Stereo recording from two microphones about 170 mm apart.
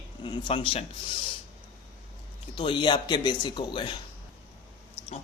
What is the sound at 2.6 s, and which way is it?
Speech, 30° left (ahead or behind).